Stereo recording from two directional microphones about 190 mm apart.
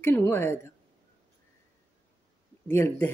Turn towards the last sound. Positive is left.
turn(degrees=10)  # may be behind; listen again after turning